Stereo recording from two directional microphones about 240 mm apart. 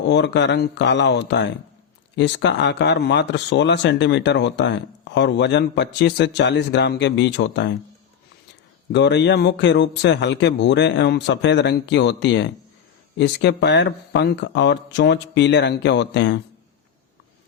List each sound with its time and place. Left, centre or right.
0.0 s speech: left
8.9 s speech: left